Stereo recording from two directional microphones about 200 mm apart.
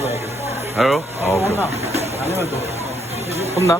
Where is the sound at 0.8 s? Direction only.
Centre (ahead or behind).